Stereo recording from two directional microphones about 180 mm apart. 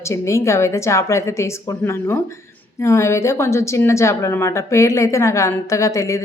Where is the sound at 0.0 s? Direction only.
15° left (ahead or behind).